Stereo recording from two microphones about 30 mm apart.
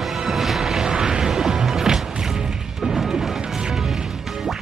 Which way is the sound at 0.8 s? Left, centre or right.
Centre.